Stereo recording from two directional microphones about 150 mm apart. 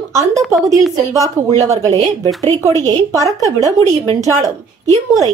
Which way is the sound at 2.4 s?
25° right (ahead or behind).